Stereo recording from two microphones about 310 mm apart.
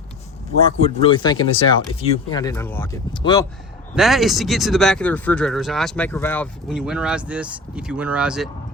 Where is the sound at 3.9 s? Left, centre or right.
Centre.